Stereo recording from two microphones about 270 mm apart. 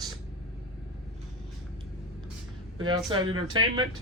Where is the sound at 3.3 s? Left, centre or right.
Centre.